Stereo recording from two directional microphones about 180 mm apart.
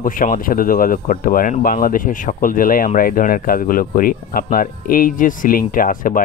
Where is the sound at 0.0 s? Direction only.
50° left (ahead or behind).